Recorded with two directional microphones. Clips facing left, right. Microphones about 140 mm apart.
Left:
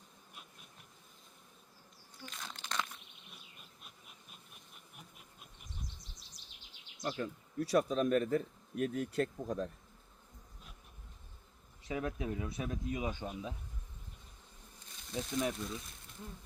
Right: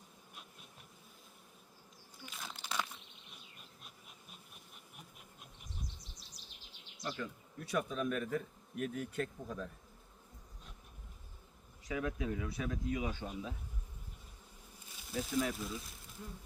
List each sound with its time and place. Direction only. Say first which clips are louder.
2.2 s crumpling: left 1 dB; 5° right (ahead or behind)
3.6 s insect: right 1 dB; centre (ahead or behind)
5.1 s bee: right 1 dB; centre (ahead or behind)
6.1 s bird vocalization: right 2 dB; centre (ahead or behind)
7.2 s speech: left 6 dB; 35° left (ahead or behind)
11.9 s speech: even; 30° left (ahead or behind)
14.8 s a sound: even; 5° right (ahead or behind)
15.5 s speech: even; 5° right (ahead or behind)